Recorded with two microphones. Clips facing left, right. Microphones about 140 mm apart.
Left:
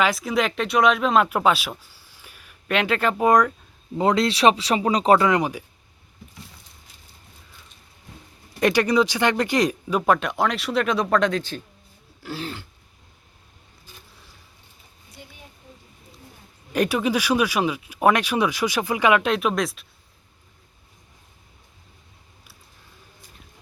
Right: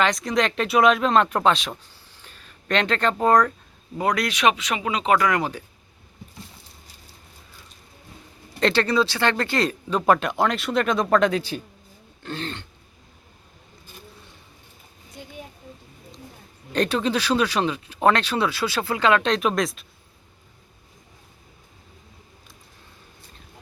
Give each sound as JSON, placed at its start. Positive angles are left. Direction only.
{"t": 0.0, "sound": "speech", "side_deg": 5}
{"t": 3.9, "sound": "speech", "side_deg": 25}
{"t": 5.2, "sound": "speech", "side_deg": 20}
{"t": 8.6, "sound": "speech", "side_deg": 15}
{"t": 10.1, "sound": "speech", "side_deg": 0}
{"t": 12.2, "sound": "speech", "side_deg": 5}
{"t": 16.7, "sound": "speech", "side_deg": 10}